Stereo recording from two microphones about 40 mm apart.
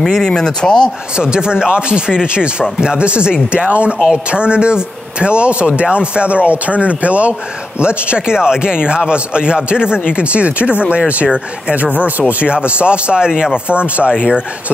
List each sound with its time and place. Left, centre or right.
0.2 s speech: centre
1.1 s speech: right
12.4 s speech: right
13.7 s speech: right